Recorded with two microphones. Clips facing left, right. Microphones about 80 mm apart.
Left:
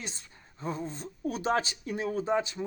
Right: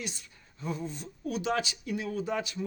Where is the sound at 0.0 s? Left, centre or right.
Left.